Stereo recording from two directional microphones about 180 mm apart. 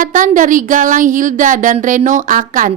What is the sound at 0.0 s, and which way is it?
A woman's voice, 45° right (ahead or behind).